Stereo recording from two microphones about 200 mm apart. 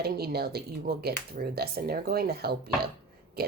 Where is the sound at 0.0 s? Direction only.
50° right (ahead or behind).